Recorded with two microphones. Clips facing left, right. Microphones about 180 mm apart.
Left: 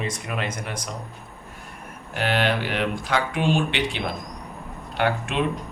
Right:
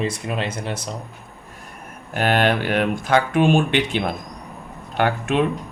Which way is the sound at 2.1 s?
50° right (ahead or behind).